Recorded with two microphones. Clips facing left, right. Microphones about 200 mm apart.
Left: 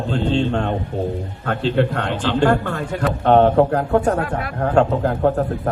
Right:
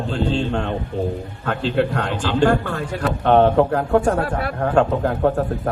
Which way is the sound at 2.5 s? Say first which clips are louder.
Left 1 dB; 40° left (ahead or behind).